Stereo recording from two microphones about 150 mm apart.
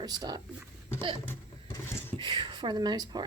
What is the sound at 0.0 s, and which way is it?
Speech, 25° right (ahead or behind).